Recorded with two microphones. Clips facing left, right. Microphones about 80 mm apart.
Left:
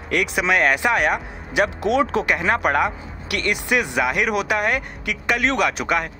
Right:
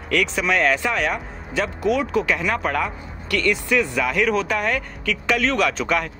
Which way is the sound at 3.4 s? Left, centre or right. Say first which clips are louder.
Right 1 dB; left.